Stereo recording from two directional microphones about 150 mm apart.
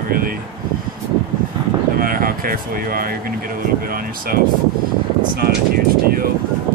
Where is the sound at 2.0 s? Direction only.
70° right (ahead or behind).